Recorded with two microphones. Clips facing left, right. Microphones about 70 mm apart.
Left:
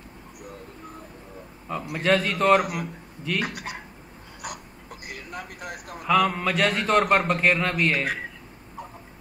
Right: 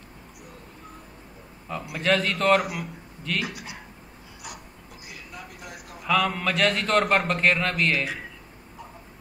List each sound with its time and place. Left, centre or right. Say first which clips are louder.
1.7 s a man's voice: left 2 dB; centre
3.4 s speech: left 3 dB; left
5.0 s a sound: left 5 dB; left
6.0 s a man's voice: left 2 dB; centre